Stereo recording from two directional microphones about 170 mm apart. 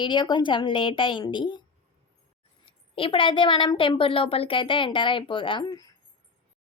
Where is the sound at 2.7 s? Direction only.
30° left (ahead or behind).